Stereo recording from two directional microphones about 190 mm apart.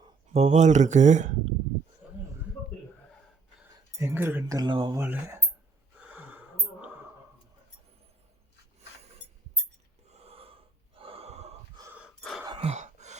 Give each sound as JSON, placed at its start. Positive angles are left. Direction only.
{"t": 0.3, "sound": "speech", "side_deg": -40}
{"t": 2.0, "sound": "a sound", "side_deg": -5}
{"t": 3.9, "sound": "speech", "side_deg": -15}
{"t": 4.9, "sound": "speech", "side_deg": -10}
{"t": 6.0, "sound": "gasp", "side_deg": -10}
{"t": 10.1, "sound": "gasp", "side_deg": -30}
{"t": 11.9, "sound": "gasp", "side_deg": 0}
{"t": 12.5, "sound": "a sound", "side_deg": -30}